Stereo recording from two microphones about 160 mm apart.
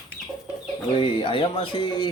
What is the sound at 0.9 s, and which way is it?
Speech, 30° left (ahead or behind).